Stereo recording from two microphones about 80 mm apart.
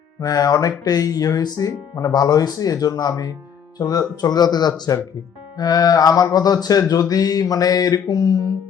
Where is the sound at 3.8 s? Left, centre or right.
Left.